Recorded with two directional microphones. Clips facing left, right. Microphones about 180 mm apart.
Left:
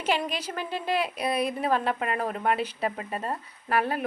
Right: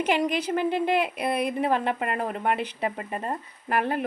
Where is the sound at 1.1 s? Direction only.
55° right (ahead or behind).